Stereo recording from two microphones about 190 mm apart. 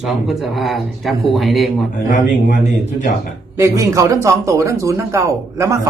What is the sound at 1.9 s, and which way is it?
Speech, 45° left (ahead or behind).